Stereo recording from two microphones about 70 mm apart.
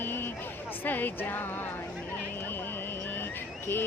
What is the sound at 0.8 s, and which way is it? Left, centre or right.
Speech, left.